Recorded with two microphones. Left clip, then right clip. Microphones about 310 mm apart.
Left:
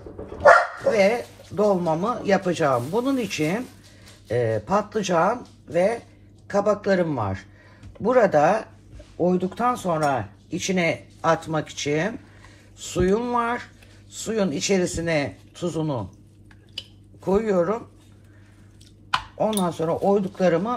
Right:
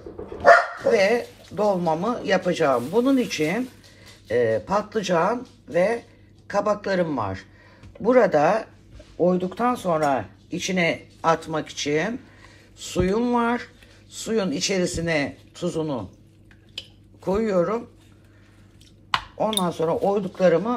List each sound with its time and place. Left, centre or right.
0.8 s speech: right
17.2 s speech: right
19.5 s speech: right